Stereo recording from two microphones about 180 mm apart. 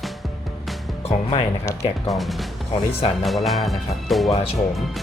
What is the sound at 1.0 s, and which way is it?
Speech, 35° left (ahead or behind).